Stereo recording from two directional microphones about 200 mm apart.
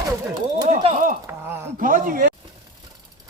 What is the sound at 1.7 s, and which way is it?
Speech, 40° right (ahead or behind).